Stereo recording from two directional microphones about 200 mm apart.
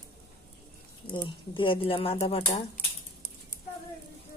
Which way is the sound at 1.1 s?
25° left (ahead or behind).